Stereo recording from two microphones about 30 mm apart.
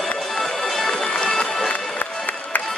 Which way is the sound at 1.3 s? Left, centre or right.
Centre.